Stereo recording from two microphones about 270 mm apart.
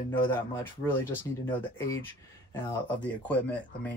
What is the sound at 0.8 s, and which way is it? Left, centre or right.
Speech, centre.